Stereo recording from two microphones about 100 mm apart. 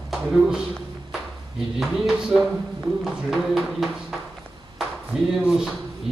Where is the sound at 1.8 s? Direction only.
5° right (ahead or behind).